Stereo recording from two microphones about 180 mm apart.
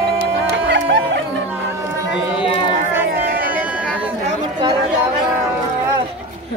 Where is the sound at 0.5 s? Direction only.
75° right (ahead or behind).